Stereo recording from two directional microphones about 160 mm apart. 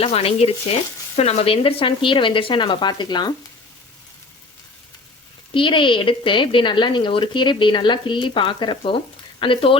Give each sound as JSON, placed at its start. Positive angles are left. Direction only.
{"t": 0.0, "sound": "speech", "side_deg": 40}
{"t": 5.5, "sound": "speech", "side_deg": 30}